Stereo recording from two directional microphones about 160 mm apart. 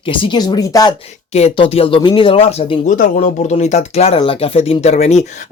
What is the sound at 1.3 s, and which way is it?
Speech, 35° left (ahead or behind).